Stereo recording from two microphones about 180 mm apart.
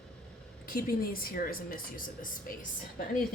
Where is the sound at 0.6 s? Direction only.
55° left (ahead or behind).